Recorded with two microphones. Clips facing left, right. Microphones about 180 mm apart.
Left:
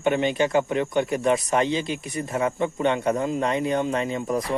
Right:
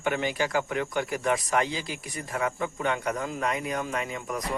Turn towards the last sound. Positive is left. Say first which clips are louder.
# left 7 dB
turn(degrees=30)  # may be behind; listen again after turning